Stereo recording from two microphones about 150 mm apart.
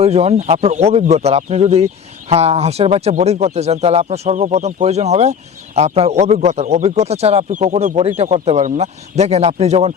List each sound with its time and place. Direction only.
0.0 s speech: 45° right (ahead or behind)